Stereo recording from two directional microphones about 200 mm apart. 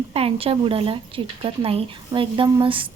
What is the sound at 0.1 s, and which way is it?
A woman's voice, 30° right (ahead or behind).